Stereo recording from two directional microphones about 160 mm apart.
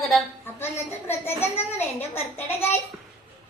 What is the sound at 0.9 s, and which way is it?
A child's voice, 15° left (ahead or behind).